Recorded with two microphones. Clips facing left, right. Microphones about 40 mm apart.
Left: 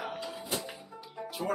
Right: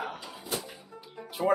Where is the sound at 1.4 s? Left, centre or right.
Right.